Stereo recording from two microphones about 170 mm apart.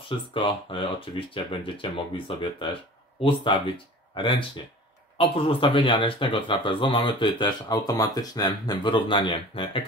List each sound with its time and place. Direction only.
0.3 s speech: 30° left (ahead or behind)